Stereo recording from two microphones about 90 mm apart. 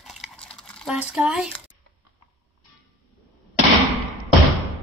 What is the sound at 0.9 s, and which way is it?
Speech, 10° right (ahead or behind).